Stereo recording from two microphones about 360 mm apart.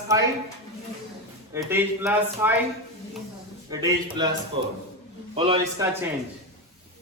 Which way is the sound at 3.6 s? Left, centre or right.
Centre.